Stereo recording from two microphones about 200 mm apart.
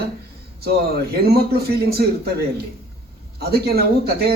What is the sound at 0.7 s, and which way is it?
Speech, 50° right (ahead or behind).